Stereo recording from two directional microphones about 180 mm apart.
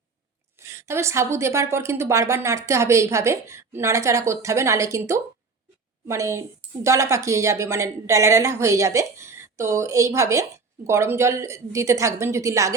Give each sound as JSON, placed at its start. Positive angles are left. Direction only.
{"t": 0.7, "sound": "a woman's voice", "side_deg": -15}